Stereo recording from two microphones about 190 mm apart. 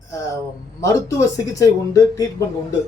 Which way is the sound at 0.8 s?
15° left (ahead or behind).